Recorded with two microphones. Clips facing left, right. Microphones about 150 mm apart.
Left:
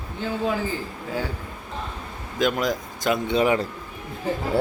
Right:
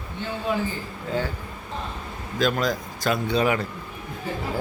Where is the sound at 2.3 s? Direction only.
20° left (ahead or behind).